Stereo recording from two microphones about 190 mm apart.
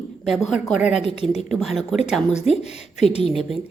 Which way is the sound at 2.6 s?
35° left (ahead or behind).